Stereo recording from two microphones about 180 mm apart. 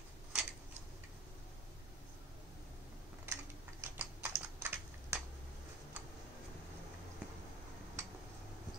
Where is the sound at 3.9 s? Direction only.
10° right (ahead or behind).